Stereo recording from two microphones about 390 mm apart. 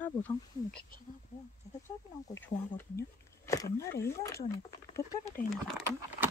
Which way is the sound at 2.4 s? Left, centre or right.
Centre.